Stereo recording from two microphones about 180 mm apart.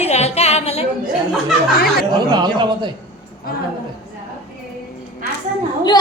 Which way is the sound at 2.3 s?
25° right (ahead or behind).